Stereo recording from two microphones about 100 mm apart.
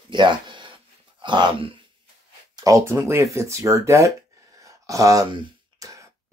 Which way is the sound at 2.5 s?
35° right (ahead or behind).